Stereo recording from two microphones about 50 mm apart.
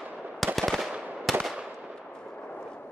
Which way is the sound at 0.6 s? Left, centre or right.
Centre.